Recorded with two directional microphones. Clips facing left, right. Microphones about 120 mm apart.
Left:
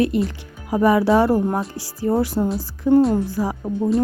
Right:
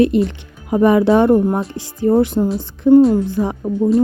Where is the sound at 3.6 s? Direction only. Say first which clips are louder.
Right 6 dB; centre (ahead or behind).